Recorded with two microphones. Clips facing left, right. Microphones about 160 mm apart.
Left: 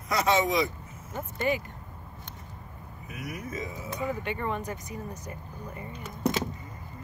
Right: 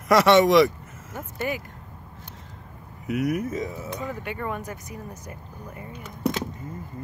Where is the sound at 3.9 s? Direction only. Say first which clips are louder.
Even; 10° left (ahead or behind).